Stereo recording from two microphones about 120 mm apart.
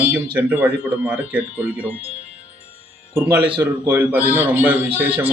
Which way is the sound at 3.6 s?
15° right (ahead or behind).